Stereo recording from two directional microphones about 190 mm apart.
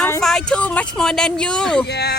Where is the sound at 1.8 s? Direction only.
60° left (ahead or behind).